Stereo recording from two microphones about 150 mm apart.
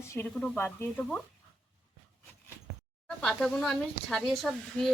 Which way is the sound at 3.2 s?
5° left (ahead or behind).